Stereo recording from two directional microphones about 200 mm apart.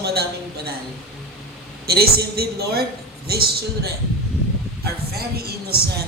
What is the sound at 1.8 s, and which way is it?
A woman's voice, 50° right (ahead or behind).